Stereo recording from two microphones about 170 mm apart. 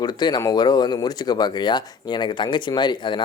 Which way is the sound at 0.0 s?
25° left (ahead or behind).